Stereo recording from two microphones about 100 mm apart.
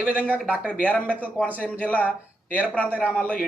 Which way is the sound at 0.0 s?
15° right (ahead or behind).